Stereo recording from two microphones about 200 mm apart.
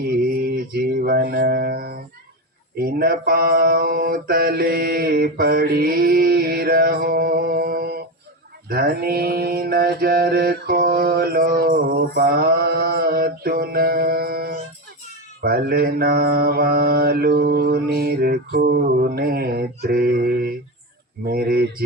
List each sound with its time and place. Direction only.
0.1 s music: 50° right (ahead or behind)
2.7 s mantra: 45° right (ahead or behind)